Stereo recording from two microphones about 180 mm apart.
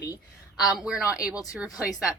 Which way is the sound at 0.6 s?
5° right (ahead or behind).